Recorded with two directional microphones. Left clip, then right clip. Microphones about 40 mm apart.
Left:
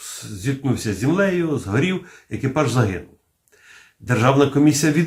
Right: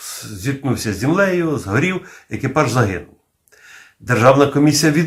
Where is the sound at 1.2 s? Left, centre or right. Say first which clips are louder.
Right 4 dB; right.